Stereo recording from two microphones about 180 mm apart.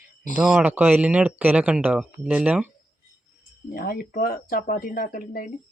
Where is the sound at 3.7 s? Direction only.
55° left (ahead or behind).